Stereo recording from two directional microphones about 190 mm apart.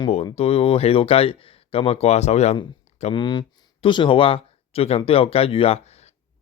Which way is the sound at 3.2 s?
25° left (ahead or behind).